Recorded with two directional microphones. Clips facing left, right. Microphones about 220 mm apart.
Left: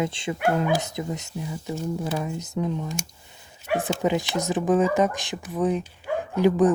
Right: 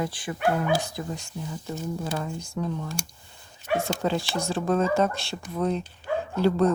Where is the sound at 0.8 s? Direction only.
20° left (ahead or behind).